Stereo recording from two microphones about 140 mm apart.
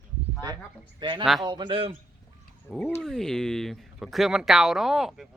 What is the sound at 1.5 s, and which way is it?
Speech, 35° right (ahead or behind).